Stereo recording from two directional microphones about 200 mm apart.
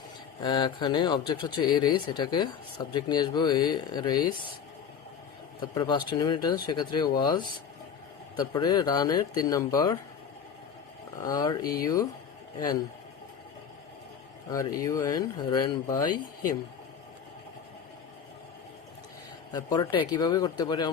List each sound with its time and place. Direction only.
0.4 s speech: 25° left (ahead or behind)
5.5 s speech: 20° left (ahead or behind)
11.2 s speech: 20° left (ahead or behind)
14.5 s speech: 15° left (ahead or behind)
19.5 s speech: 20° left (ahead or behind)